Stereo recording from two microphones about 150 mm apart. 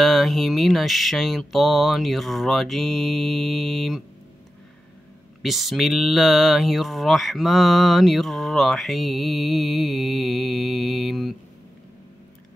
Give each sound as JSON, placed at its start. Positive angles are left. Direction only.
{"t": 0.0, "sound": "speech", "side_deg": 0}
{"t": 5.4, "sound": "speech", "side_deg": 0}